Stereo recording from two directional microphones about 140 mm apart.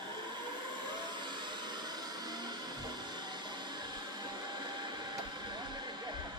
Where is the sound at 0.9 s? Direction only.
30° right (ahead or behind).